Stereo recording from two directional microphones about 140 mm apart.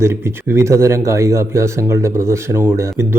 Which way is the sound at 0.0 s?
15° right (ahead or behind).